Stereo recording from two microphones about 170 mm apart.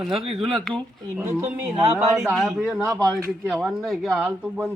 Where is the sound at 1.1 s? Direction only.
10° right (ahead or behind).